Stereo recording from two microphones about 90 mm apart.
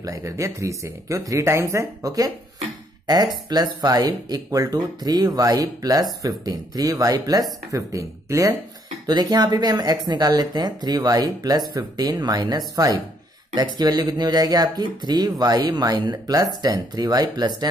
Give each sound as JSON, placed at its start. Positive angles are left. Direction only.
{"t": 0.0, "sound": "speech", "side_deg": -35}
{"t": 3.4, "sound": "speech", "side_deg": -50}